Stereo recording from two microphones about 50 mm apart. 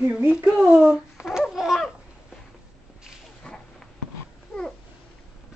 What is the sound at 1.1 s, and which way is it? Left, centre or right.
Babbling, centre.